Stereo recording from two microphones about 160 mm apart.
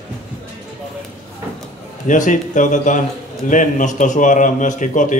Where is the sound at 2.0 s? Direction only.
50° left (ahead or behind).